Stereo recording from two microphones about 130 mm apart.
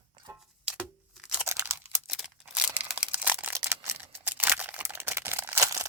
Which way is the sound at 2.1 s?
5° right (ahead or behind).